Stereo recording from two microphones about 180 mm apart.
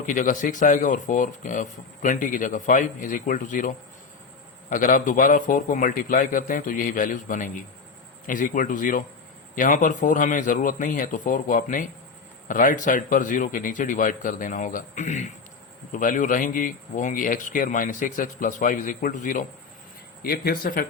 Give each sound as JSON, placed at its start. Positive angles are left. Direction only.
{"t": 0.0, "sound": "speech", "side_deg": 45}
{"t": 20.2, "sound": "speech", "side_deg": 55}